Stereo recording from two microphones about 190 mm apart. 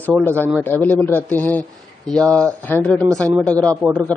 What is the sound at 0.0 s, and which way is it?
Speech, 10° left (ahead or behind).